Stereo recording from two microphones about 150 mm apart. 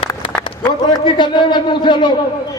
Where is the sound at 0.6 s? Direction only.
30° left (ahead or behind).